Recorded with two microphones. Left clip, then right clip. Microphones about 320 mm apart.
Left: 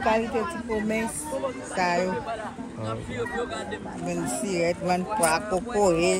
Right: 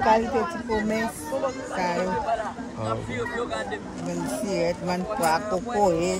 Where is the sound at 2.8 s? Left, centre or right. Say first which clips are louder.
Right 3 dB; right.